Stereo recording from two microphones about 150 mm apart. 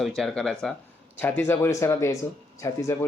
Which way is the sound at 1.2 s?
15° left (ahead or behind).